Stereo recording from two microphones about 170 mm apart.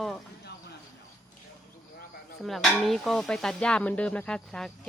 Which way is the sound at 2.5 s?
Centre (ahead or behind).